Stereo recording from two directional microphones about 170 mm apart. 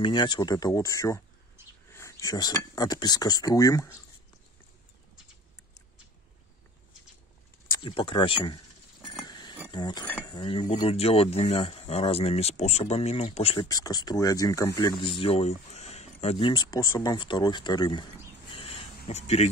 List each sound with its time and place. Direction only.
0.0 s speech: 25° left (ahead or behind)
7.8 s speech: 30° left (ahead or behind)
9.3 s a sound: 25° left (ahead or behind)
9.7 s speech: 25° left (ahead or behind)
13.7 s speech: 20° left (ahead or behind)
18.5 s a sound: 35° left (ahead or behind)